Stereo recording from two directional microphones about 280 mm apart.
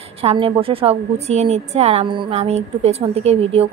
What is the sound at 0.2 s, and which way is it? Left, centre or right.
A woman's voice, centre.